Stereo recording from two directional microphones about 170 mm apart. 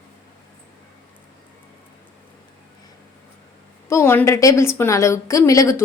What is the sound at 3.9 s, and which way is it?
A woman's voice, 15° left (ahead or behind).